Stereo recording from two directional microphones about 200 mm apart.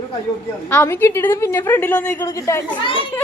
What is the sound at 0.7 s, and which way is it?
A woman's voice, 10° left (ahead or behind).